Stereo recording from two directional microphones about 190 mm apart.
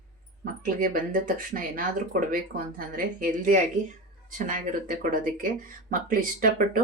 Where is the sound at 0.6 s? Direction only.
45° right (ahead or behind).